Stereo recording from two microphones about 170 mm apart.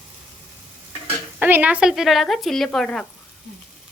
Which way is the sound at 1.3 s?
10° right (ahead or behind).